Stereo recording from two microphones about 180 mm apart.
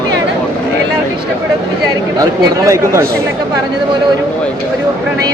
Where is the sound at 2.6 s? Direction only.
15° right (ahead or behind).